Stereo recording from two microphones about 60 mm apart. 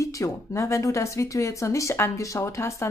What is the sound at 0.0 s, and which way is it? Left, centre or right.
Speech, left.